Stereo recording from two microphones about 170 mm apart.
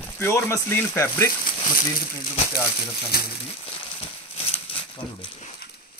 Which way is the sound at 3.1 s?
65° left (ahead or behind).